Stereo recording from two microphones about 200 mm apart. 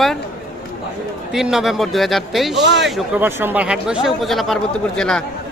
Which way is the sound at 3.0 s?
10° right (ahead or behind).